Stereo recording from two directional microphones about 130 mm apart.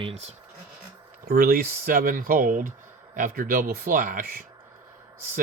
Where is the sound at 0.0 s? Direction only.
55° right (ahead or behind).